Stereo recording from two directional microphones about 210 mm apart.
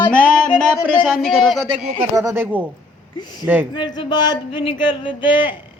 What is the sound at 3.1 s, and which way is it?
Speech, 20° left (ahead or behind).